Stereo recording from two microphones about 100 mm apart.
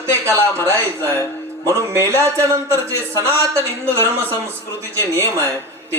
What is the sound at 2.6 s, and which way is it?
Speech, 30° left (ahead or behind).